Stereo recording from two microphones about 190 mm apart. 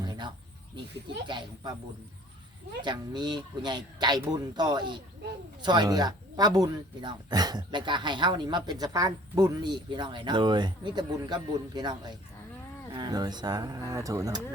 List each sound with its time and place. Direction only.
0.0 s a sound: 25° right (ahead or behind)
1.0 s speech: 25° right (ahead or behind)
2.8 s speech: 25° right (ahead or behind)